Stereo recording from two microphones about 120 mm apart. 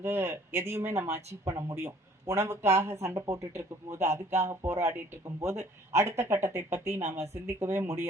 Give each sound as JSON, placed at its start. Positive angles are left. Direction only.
{"t": 0.0, "sound": "speech", "side_deg": -20}